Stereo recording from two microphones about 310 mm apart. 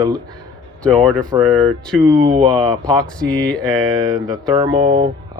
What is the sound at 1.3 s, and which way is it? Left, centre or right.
Speech, centre.